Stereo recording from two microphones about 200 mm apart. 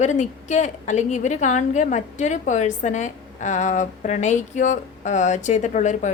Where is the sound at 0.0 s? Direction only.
35° left (ahead or behind).